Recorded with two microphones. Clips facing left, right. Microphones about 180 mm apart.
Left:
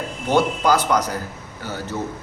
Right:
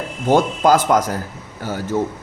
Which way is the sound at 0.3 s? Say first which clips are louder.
Right 4 dB; 45° right (ahead or behind).